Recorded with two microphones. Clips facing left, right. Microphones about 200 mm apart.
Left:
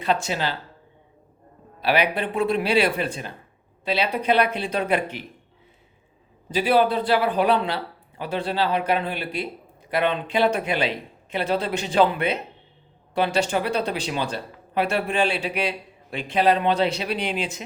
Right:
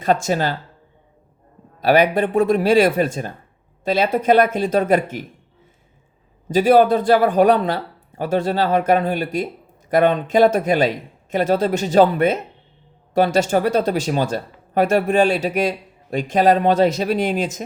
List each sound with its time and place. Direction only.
0.0 s speech: 45° right (ahead or behind)
1.8 s speech: 45° right (ahead or behind)
6.5 s speech: 45° right (ahead or behind)